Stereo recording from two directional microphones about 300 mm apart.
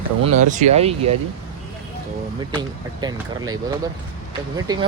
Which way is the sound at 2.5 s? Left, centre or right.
Centre.